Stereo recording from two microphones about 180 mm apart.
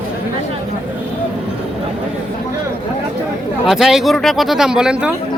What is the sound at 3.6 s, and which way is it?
Speech, centre (ahead or behind).